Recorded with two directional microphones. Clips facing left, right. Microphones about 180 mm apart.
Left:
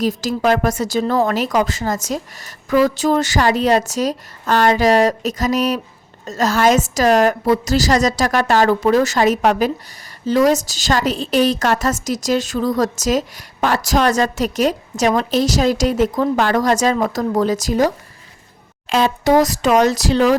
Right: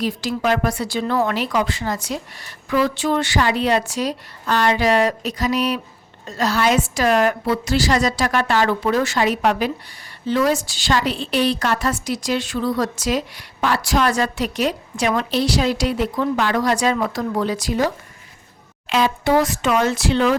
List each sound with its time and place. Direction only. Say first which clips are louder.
0.0 s a woman's voice: left 4 dB; 40° left (ahead or behind)